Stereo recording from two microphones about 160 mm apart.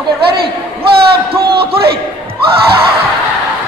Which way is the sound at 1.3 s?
15° right (ahead or behind).